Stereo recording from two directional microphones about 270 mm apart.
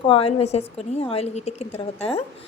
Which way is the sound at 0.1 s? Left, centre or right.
Left.